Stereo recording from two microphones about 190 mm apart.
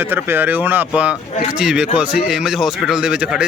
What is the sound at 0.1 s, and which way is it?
Speech, 10° right (ahead or behind).